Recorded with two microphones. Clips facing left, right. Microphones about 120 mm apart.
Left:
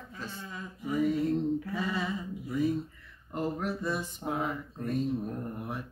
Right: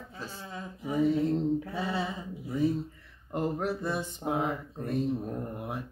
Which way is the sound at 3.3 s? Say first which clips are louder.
Right 2 dB; 25° right (ahead or behind).